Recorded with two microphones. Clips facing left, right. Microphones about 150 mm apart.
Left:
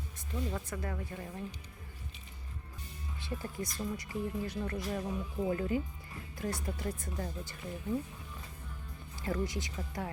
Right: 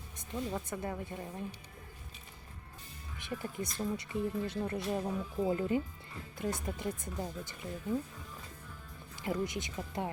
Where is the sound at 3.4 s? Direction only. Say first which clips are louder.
Right 2 dB; 25° right (ahead or behind).